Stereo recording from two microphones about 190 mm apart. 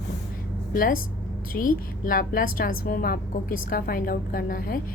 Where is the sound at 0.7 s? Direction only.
50° left (ahead or behind).